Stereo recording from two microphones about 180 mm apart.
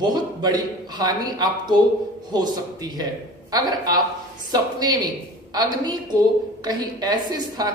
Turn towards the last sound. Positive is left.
turn(degrees=-20)  # may be behind; listen again after turning